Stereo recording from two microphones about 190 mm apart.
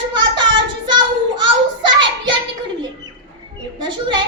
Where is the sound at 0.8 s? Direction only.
25° right (ahead or behind).